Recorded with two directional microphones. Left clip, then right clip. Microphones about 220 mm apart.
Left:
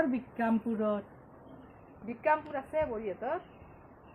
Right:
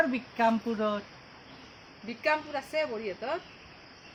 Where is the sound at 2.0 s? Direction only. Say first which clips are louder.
Right 1 dB; 25° right (ahead or behind).